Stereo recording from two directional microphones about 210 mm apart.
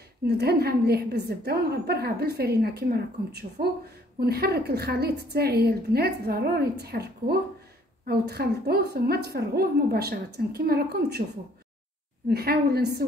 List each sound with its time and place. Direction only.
0.3 s a woman's voice: 50° right (ahead or behind)
12.3 s a woman's voice: 50° right (ahead or behind)